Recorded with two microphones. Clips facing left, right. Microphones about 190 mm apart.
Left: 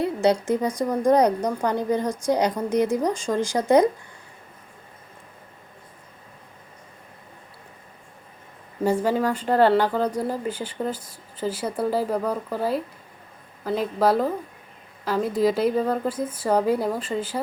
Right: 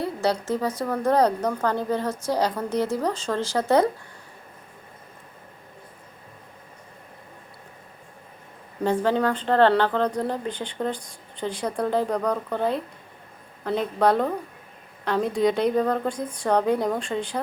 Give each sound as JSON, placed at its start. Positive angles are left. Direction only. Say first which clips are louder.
{"t": 0.0, "sound": "a woman's voice", "louder": "left 4 dB", "side_deg": 20}
{"t": 8.8, "sound": "a woman's voice", "louder": "even", "side_deg": 10}